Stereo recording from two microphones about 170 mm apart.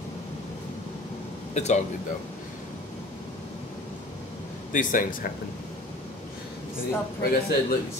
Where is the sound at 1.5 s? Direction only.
40° left (ahead or behind).